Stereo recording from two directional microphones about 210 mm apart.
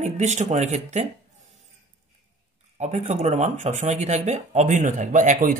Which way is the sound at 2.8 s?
35° right (ahead or behind).